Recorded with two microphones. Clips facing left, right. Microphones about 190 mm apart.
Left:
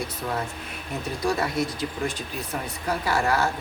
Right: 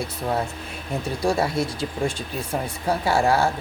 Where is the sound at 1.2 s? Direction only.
30° right (ahead or behind).